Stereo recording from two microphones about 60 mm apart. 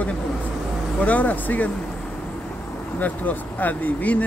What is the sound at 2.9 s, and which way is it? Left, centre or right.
Speech, left.